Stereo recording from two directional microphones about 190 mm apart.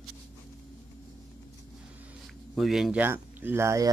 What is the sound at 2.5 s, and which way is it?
Speech, centre (ahead or behind).